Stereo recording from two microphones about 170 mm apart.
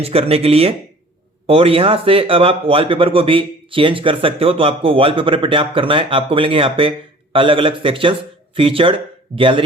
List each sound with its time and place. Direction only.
0.0 s speech: 35° right (ahead or behind)